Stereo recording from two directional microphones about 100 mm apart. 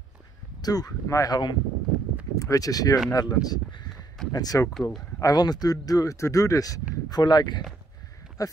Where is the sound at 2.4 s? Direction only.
35° left (ahead or behind).